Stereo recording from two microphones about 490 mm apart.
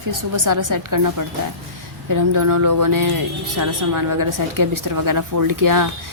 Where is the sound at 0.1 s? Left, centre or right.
Right.